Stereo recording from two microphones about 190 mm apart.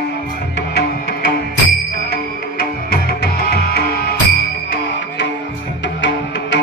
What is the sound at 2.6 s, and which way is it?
Music, 55° left (ahead or behind).